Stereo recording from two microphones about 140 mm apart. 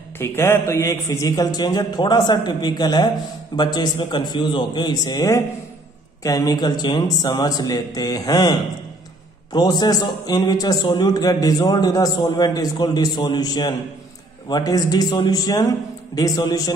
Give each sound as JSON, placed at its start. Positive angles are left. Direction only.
{"t": 0.2, "sound": "a man's voice", "side_deg": 20}